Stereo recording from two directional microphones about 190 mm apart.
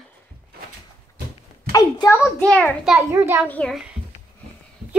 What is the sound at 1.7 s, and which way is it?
A child's voice, 20° left (ahead or behind).